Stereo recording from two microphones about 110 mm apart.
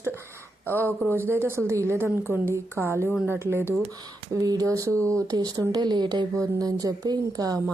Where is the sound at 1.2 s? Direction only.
20° right (ahead or behind).